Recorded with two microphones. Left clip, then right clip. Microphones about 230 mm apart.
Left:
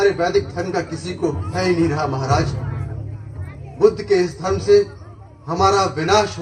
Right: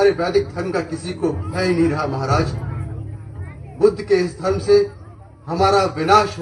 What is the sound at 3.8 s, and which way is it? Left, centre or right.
A man's voice, right.